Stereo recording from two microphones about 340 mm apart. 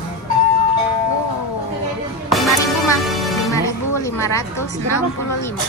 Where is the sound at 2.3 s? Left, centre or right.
Centre.